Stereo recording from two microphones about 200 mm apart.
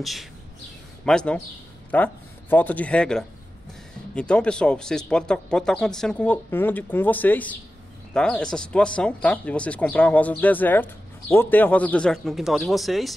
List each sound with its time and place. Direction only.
0.0 s speech: centre (ahead or behind)